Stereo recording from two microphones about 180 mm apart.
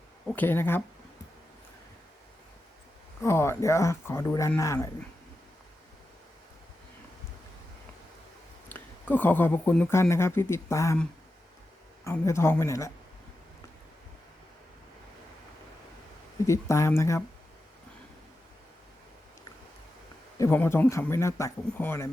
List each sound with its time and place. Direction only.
0.3 s speech: 10° left (ahead or behind)
3.2 s speech: 15° left (ahead or behind)
8.7 s speech: 10° left (ahead or behind)
12.2 s speech: 15° left (ahead or behind)
16.5 s speech: 15° left (ahead or behind)
20.4 s speech: 10° left (ahead or behind)